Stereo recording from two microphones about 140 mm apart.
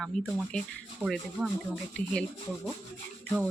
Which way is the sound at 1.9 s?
10° left (ahead or behind).